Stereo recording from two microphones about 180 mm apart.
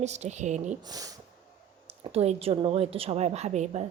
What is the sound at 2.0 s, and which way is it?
Speech, 35° right (ahead or behind).